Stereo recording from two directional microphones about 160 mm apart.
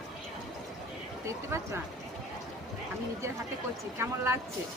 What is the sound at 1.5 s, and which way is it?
Speech, 15° right (ahead or behind).